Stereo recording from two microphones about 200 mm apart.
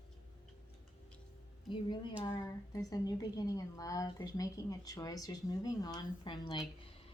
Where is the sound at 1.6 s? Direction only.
25° left (ahead or behind).